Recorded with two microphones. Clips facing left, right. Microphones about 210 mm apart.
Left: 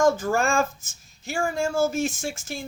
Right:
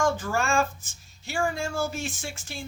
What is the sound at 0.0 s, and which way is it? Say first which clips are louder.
Speech: left 5 dB; 45° left (ahead or behind).